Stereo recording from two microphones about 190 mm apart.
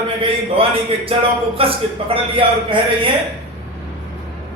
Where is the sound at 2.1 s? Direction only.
25° right (ahead or behind).